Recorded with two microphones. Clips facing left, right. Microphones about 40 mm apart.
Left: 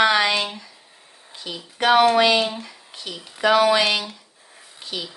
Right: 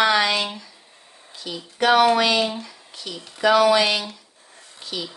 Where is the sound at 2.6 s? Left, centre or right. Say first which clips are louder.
Even; centre.